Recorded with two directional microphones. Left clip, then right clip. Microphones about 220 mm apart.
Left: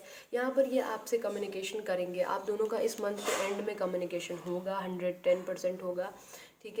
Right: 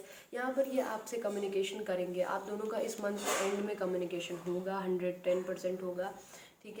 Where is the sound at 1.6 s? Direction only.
50° left (ahead or behind).